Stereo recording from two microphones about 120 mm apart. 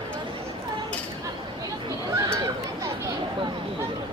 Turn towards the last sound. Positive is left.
turn(degrees=-20)  # may be behind; listen again after turning